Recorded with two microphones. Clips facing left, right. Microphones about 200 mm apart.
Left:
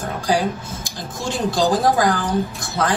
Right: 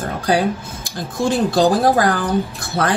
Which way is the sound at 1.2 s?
60° right (ahead or behind).